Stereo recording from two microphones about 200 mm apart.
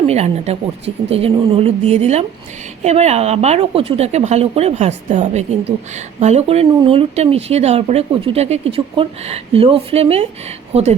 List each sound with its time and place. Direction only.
0.1 s speech: 30° right (ahead or behind)